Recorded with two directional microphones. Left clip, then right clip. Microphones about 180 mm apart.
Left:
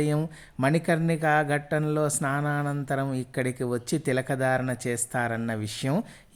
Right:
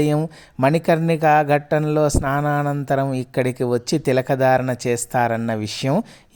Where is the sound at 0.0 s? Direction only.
35° right (ahead or behind).